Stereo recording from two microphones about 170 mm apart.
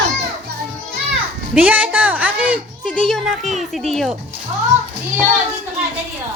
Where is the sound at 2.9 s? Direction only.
Centre (ahead or behind).